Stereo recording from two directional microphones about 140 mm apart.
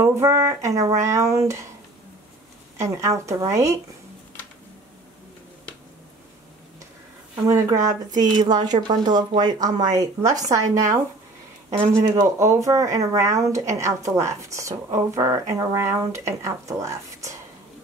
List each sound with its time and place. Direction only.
0.0 s speech: 20° right (ahead or behind)
2.8 s speech: 20° right (ahead or behind)
7.4 s speech: 25° right (ahead or behind)
11.9 s speech: 20° right (ahead or behind)